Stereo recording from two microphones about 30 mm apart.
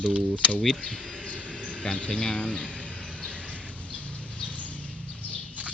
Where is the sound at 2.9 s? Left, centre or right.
Left.